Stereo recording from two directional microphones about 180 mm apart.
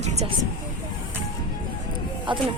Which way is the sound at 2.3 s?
25° right (ahead or behind).